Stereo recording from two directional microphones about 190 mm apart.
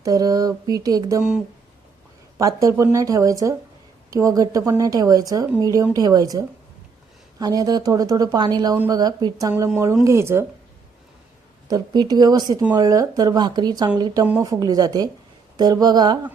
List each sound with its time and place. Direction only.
0.0 s speech: 20° right (ahead or behind)
2.4 s speech: 15° right (ahead or behind)
11.7 s speech: 20° right (ahead or behind)